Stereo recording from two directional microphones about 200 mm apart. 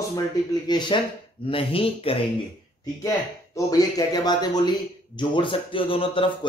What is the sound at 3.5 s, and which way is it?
Speech, 20° left (ahead or behind).